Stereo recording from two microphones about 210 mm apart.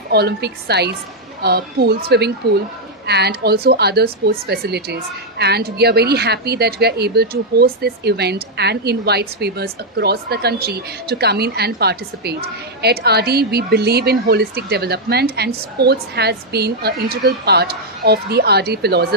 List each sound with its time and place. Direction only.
0.1 s speech: 50° right (ahead or behind)